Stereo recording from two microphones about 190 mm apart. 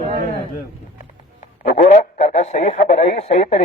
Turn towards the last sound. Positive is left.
turn(degrees=35)  # may be behind; listen again after turning